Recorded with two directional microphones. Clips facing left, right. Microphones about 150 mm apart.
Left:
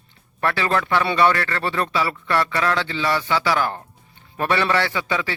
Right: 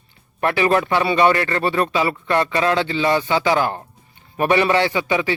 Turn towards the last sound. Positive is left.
turn(degrees=-15)  # may be behind; listen again after turning